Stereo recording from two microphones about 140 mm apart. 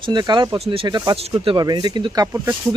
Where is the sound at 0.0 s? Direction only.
30° right (ahead or behind).